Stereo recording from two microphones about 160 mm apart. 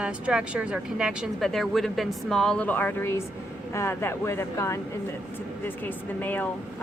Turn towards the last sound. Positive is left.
turn(degrees=10)  # may be behind; listen again after turning